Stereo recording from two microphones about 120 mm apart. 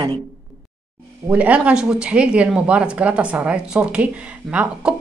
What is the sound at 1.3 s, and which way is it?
Speech, 10° right (ahead or behind).